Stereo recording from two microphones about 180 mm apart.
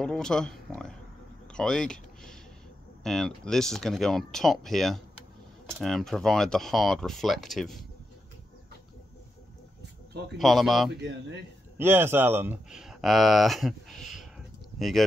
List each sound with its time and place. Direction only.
0.0 s speech: 5° left (ahead or behind)
1.6 s speech: 5° left (ahead or behind)
10.3 s speech: centre (ahead or behind)
11.0 s speech: 80° right
11.8 s speech: 10° right (ahead or behind)